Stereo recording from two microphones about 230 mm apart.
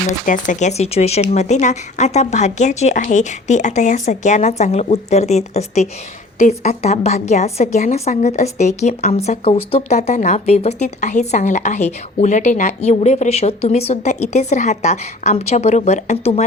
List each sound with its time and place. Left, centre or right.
0.1 s a woman's voice: left